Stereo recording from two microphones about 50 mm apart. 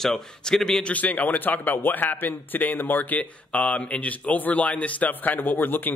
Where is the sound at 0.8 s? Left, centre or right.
Left.